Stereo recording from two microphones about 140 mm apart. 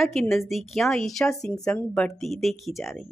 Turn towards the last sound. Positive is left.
turn(degrees=0)  # may be behind; listen again after turning